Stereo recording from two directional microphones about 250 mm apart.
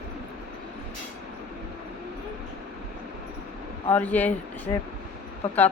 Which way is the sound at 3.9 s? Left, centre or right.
Centre.